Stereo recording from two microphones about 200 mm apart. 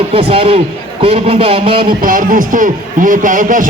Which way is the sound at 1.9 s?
45° right (ahead or behind).